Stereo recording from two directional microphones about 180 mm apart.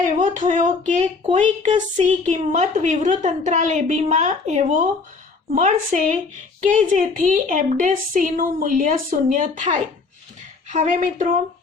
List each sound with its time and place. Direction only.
0.0 s a woman's voice: 45° right (ahead or behind)